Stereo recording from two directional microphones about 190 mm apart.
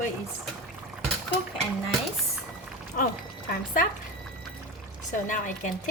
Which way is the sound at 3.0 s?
45° left (ahead or behind).